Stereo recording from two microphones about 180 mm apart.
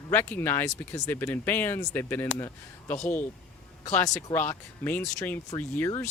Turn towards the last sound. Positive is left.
turn(degrees=10)  # may be behind; listen again after turning